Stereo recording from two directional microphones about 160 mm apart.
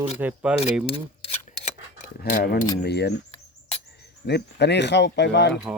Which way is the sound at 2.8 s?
90° left.